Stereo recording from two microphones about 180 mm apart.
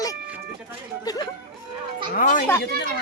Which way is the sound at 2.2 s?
45° left (ahead or behind).